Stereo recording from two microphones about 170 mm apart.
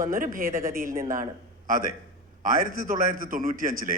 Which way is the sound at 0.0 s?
55° right (ahead or behind).